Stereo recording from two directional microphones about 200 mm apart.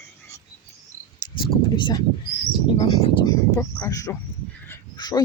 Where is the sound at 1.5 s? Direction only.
25° left (ahead or behind).